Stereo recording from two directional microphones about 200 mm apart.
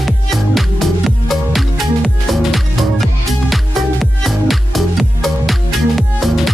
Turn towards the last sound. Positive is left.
turn(degrees=0)  # may be behind; listen again after turning